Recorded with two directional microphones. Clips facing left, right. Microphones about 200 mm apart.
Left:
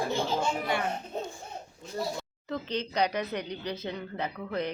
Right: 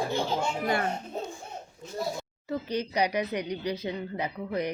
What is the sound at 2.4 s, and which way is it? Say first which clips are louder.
A woman's voice: right 2 dB; 10° right (ahead or behind).